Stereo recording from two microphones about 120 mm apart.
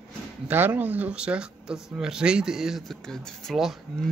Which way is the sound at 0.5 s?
15° right (ahead or behind).